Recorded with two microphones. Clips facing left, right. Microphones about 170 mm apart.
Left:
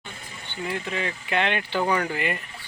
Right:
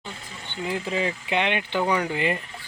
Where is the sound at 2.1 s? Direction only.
25° right (ahead or behind).